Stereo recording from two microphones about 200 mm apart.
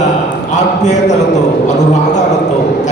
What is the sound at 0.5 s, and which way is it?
Speech, 35° left (ahead or behind).